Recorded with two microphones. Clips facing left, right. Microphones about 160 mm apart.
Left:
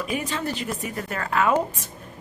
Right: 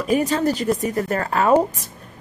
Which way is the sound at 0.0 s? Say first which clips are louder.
Right 9 dB; 40° right (ahead or behind).